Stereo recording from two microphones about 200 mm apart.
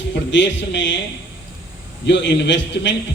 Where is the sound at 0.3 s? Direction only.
65° left (ahead or behind).